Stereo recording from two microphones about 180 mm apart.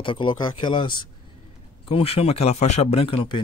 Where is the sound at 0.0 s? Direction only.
25° left (ahead or behind).